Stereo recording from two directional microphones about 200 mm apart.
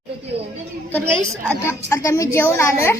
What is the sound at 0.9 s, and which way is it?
A woman's voice, 10° left (ahead or behind).